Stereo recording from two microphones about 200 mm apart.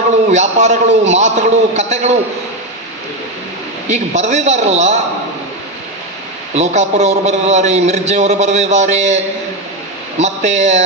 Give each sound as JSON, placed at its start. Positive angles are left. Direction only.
{"t": 0.3, "sound": "a man's voice", "side_deg": -35}
{"t": 3.8, "sound": "a man's voice", "side_deg": -35}
{"t": 6.5, "sound": "a man's voice", "side_deg": -35}